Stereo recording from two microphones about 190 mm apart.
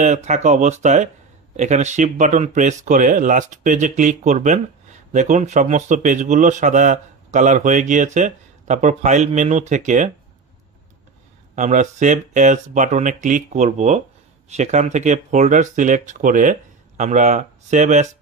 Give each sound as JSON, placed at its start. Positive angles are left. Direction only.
{"t": 0.0, "sound": "a man's voice", "side_deg": -40}
{"t": 11.5, "sound": "a man's voice", "side_deg": -40}